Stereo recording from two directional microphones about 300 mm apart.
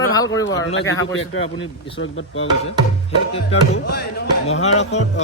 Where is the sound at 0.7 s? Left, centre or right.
Left.